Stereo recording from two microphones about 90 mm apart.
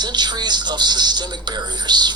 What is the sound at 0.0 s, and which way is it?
Speech, 55° right (ahead or behind).